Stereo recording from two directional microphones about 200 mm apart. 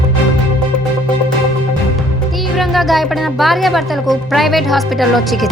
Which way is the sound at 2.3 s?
Centre (ahead or behind).